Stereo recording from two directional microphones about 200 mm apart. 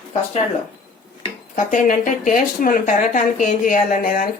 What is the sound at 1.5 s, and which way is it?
Speech, 40° left (ahead or behind).